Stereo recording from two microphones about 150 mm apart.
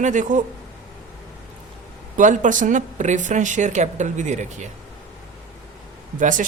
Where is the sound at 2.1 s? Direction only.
60° right (ahead or behind).